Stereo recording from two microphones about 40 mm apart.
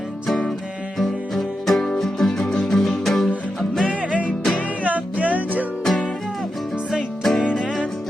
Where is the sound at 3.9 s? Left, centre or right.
Right.